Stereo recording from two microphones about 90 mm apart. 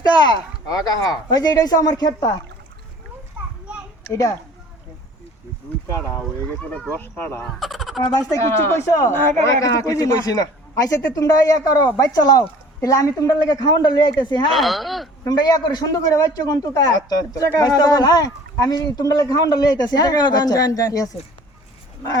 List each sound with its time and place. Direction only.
0.0 s a man's voice: 50° left (ahead or behind)
4.1 s a man's voice: 40° left (ahead or behind)
6.6 s speech: 10° left (ahead or behind)
7.0 s speech: 25° left (ahead or behind)
7.6 s fowl: centre (ahead or behind)
8.7 s a man's voice: 35° left (ahead or behind); by 14.4 s 55° left (ahead or behind)
14.5 s speech: centre (ahead or behind)
15.3 s a man's voice: 45° left (ahead or behind)